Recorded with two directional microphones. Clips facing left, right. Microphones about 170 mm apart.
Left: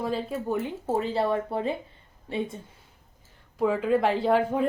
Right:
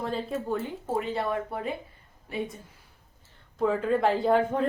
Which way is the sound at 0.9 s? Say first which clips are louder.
Left 3 dB; 30° left (ahead or behind).